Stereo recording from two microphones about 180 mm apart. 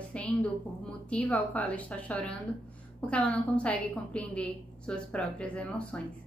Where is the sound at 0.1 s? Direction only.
5° left (ahead or behind).